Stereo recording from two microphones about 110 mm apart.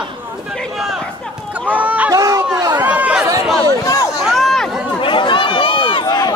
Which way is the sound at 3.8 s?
30° left (ahead or behind).